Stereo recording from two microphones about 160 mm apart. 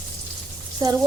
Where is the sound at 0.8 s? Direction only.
25° right (ahead or behind).